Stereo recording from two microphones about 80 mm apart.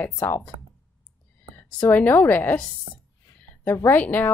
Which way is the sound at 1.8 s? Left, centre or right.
Left.